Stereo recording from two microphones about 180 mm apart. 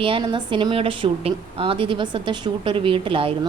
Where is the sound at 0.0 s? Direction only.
25° right (ahead or behind).